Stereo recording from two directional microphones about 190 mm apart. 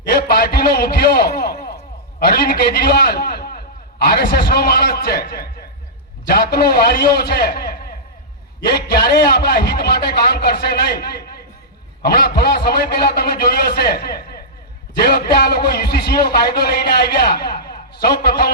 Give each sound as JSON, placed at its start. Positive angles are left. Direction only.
{"t": 0.0, "sound": "a man's voice", "side_deg": 55}